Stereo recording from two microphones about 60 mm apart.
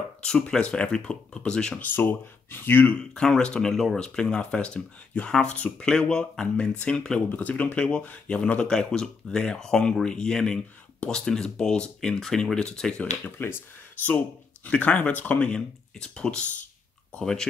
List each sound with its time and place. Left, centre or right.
0.2 s speech: centre
1.8 s speech: left
3.2 s speech: centre
3.7 s speech: centre
7.2 s speech: left
13.0 s speech: left; by 17.5 s centre